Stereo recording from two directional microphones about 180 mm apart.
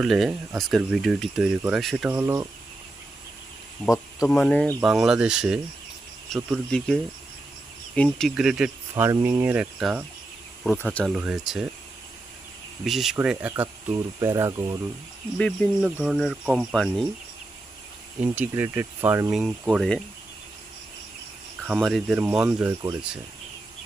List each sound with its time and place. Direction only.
0.0 s speech: centre (ahead or behind)
2.0 s speech: 15° right (ahead or behind)
3.8 s speech: 5° right (ahead or behind)
4.8 s speech: 5° right (ahead or behind)
9.0 s speech: 15° right (ahead or behind)
12.8 s speech: centre (ahead or behind); by 14.8 s 15° right (ahead or behind)
15.4 s speech: 5° left (ahead or behind)
18.2 s speech: 10° right (ahead or behind)
19.3 s speech: centre (ahead or behind)
21.7 s speech: centre (ahead or behind)